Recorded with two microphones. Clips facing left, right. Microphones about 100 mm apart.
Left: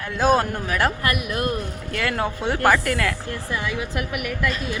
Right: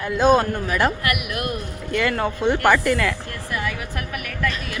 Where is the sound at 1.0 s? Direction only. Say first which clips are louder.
Left 1 dB; 30° left (ahead or behind).